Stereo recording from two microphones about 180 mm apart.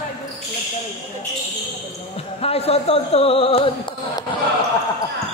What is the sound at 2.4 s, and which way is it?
Speech, 35° left (ahead or behind).